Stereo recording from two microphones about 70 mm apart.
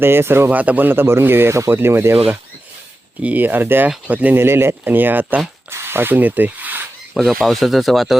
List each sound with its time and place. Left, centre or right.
0.0 s speech: right
0.5 s speech: right
3.2 s speech: right
4.4 s speech: right
5.7 s zipper: right
7.1 s speech: centre